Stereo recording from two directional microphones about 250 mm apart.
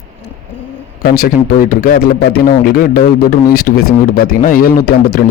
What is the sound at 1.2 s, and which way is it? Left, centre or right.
A man's voice, left.